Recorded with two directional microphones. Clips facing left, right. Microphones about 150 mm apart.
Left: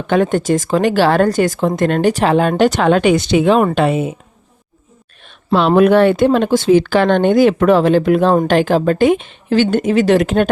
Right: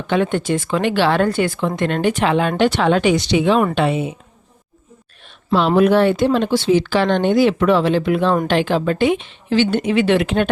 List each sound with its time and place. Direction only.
0.1 s speech: 45° left (ahead or behind)
5.5 s speech: 60° left (ahead or behind); by 10.5 s 45° left (ahead or behind)